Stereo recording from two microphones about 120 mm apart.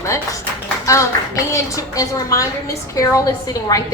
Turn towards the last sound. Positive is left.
turn(degrees=30)  # may be behind; listen again after turning